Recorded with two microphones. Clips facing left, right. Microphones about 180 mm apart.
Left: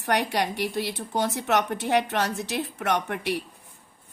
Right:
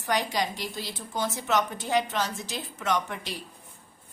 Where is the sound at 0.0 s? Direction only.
65° left (ahead or behind).